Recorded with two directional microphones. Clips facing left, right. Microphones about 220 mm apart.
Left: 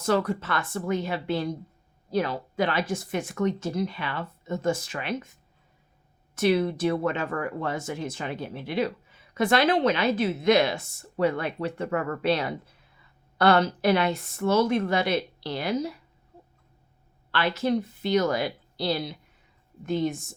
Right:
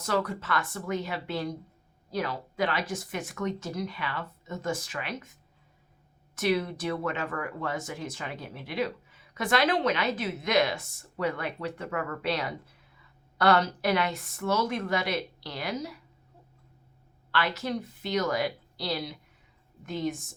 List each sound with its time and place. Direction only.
0.0 s speech: 30° left (ahead or behind)
6.3 s speech: 30° left (ahead or behind)
17.3 s speech: 30° left (ahead or behind)